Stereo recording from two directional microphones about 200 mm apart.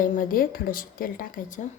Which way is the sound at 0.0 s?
45° left (ahead or behind).